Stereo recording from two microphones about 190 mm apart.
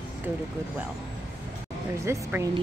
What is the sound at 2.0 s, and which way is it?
Speech, 15° right (ahead or behind).